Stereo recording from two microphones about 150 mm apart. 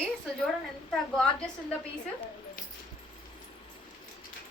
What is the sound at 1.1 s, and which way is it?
Speech, 5° left (ahead or behind).